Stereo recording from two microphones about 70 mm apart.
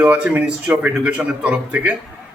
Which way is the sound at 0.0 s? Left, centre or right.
Right.